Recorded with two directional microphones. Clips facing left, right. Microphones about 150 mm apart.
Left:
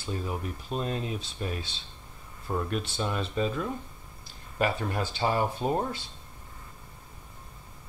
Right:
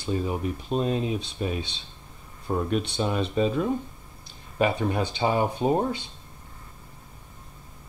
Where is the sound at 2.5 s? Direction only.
10° right (ahead or behind).